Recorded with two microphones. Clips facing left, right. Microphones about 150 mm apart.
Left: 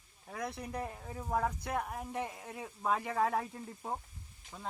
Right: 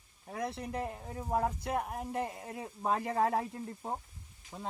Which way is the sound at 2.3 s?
5° right (ahead or behind).